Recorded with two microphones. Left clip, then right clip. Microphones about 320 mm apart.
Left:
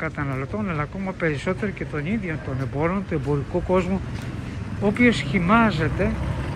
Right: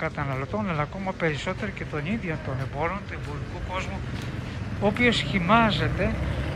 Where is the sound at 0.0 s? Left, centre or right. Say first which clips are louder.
Left 1 dB; centre.